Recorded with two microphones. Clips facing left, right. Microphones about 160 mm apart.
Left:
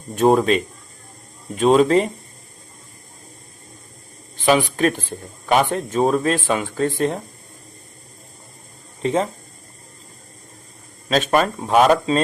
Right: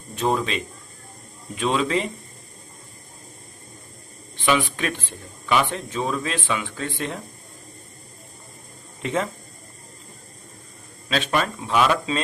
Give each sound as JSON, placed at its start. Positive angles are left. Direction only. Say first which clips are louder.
{"t": 0.2, "sound": "speech", "louder": "left 8 dB", "side_deg": 50}
{"t": 4.4, "sound": "speech", "louder": "left 5 dB", "side_deg": 40}
{"t": 9.0, "sound": "speech", "louder": "left 5 dB", "side_deg": 35}
{"t": 11.1, "sound": "speech", "louder": "left 6 dB", "side_deg": 45}